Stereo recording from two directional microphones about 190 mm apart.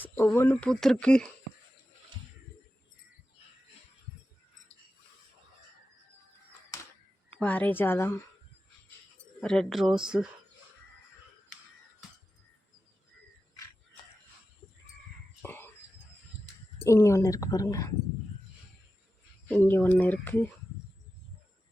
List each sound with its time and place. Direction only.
0.0 s speech: 10° left (ahead or behind)
7.3 s speech: 10° left (ahead or behind)
9.4 s speech: 5° left (ahead or behind)
15.4 s a sound: 10° left (ahead or behind)
16.8 s speech: 15° left (ahead or behind)
19.6 s speech: 10° left (ahead or behind)